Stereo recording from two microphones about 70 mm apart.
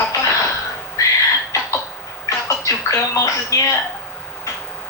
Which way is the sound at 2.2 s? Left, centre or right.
Left.